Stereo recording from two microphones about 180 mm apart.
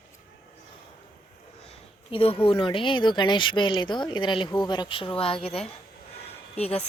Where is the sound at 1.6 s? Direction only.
30° left (ahead or behind).